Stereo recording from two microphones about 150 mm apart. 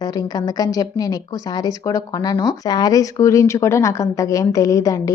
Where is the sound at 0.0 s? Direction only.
25° left (ahead or behind).